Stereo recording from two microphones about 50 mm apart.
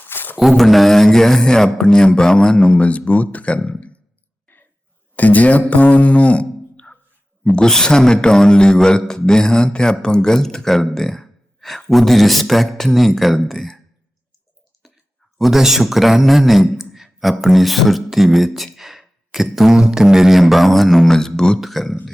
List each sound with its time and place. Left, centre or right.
0.1 s mantra: left
0.5 s a man's voice: centre; by 3.9 s left
4.5 s a sound: left
5.1 s speech: left
7.5 s a man's voice: centre
15.4 s a man's voice: centre
21.6 s a man's voice: centre